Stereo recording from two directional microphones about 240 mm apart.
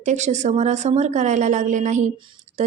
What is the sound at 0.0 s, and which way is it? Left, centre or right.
A woman's voice, right.